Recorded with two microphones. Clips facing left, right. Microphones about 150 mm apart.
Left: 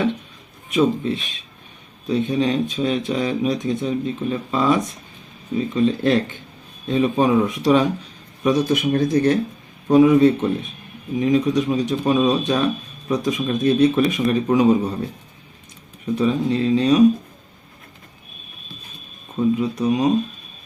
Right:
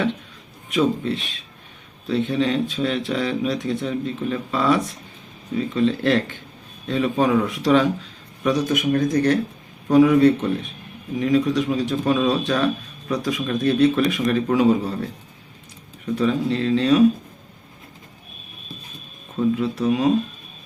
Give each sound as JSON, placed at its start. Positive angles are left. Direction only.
{"t": 0.7, "sound": "speech", "side_deg": 20}
{"t": 16.1, "sound": "speech", "side_deg": 20}
{"t": 19.5, "sound": "speech", "side_deg": 15}